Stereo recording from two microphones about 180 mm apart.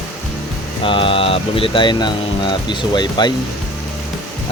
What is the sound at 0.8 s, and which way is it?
Speech, 30° left (ahead or behind).